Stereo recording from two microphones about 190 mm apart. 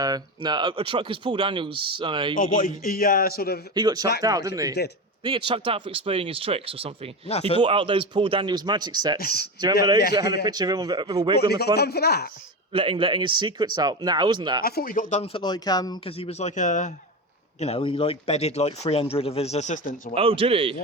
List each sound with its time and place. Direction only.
0.0 s speech: 20° right (ahead or behind)
2.4 s a man's voice: 45° left (ahead or behind)
3.8 s speech: 20° right (ahead or behind)
5.5 s speech: 30° right (ahead or behind)
7.3 s speech: 35° left (ahead or behind)
7.6 s speech: 25° right (ahead or behind)
9.1 s a man's voice: 55° left (ahead or behind)
10.4 s speech: 20° right (ahead or behind)
11.3 s a man's voice: 55° left (ahead or behind)
12.7 s speech: 25° right (ahead or behind)
14.6 s a man's voice: 50° left (ahead or behind)
15.2 s speech: 25° left (ahead or behind); by 20.1 s 40° left (ahead or behind)
20.1 s speech: 30° right (ahead or behind)